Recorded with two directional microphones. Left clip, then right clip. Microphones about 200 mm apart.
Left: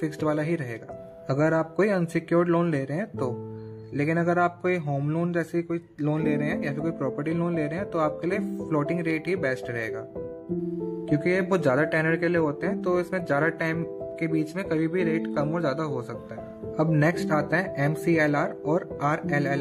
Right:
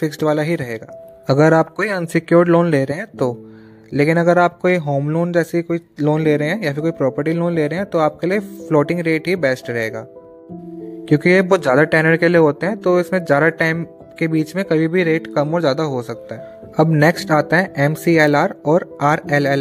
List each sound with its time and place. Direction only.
0.0 s speech: 35° right (ahead or behind)
11.1 s speech: 40° right (ahead or behind)